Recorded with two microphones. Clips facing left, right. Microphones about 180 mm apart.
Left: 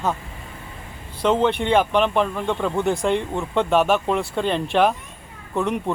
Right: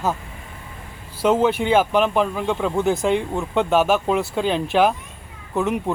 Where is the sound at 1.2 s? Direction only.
5° right (ahead or behind).